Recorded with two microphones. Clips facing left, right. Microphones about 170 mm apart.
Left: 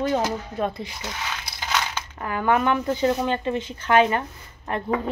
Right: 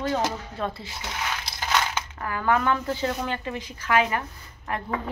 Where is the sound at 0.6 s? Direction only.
20° left (ahead or behind).